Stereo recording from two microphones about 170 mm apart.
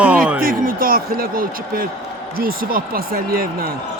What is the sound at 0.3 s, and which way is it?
Speech, 55° right (ahead or behind).